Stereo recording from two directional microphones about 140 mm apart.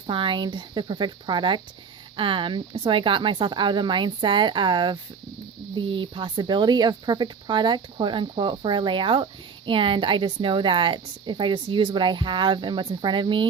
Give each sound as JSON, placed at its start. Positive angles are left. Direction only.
{"t": 0.1, "sound": "a woman's voice", "side_deg": -35}